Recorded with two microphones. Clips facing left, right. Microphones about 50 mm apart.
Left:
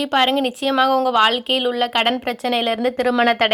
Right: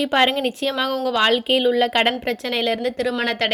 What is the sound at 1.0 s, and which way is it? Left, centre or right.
Speech, centre.